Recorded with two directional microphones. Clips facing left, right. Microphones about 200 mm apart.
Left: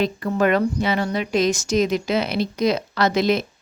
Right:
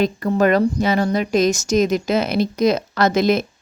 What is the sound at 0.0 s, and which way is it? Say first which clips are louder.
A woman's voice: right 3 dB; 40° right (ahead or behind).